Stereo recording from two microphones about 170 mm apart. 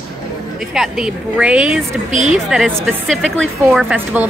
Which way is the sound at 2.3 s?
Centre (ahead or behind).